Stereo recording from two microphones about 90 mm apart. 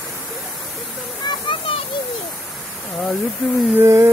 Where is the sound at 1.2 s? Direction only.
65° left (ahead or behind).